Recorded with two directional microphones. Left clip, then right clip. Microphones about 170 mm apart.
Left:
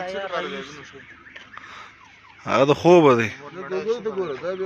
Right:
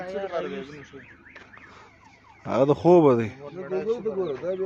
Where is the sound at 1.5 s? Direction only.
10° right (ahead or behind).